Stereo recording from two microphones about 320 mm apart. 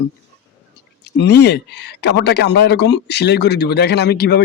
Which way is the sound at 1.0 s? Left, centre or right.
Left.